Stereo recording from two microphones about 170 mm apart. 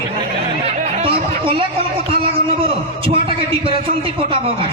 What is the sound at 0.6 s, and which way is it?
Chatter, 35° right (ahead or behind).